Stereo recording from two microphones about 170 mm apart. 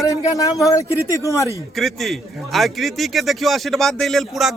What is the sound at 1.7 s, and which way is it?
A man's voice, centre (ahead or behind).